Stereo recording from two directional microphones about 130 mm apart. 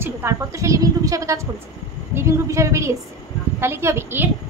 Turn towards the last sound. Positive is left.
turn(degrees=-20)  # may be behind; listen again after turning